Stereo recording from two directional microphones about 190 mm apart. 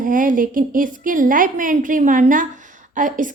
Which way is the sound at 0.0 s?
45° right (ahead or behind).